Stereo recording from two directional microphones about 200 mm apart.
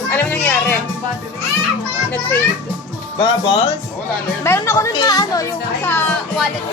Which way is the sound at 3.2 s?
20° left (ahead or behind).